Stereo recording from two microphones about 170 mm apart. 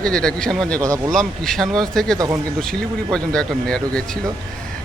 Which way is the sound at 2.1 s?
20° right (ahead or behind).